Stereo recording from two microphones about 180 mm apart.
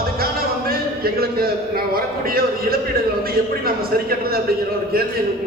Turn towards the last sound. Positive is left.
turn(degrees=-55)  # may be behind; listen again after turning